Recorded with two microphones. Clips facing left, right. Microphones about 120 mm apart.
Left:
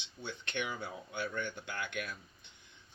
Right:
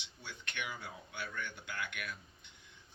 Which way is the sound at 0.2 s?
25° left (ahead or behind).